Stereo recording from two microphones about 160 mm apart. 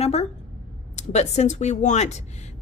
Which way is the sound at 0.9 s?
45° left (ahead or behind).